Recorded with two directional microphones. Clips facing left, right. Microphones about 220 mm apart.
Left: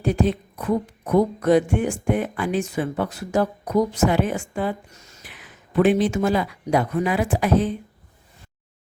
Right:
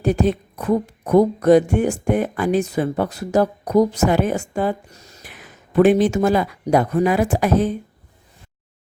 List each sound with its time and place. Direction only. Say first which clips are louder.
0.0 s music: right 3 dB; 40° right (ahead or behind)